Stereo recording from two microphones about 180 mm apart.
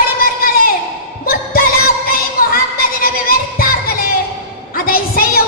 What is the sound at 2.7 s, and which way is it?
Music, 55° left (ahead or behind).